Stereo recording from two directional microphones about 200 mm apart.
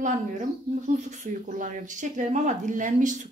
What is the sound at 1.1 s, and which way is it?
Speech, 40° right (ahead or behind).